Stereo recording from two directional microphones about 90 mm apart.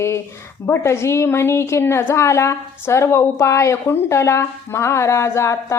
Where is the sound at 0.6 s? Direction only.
30° left (ahead or behind).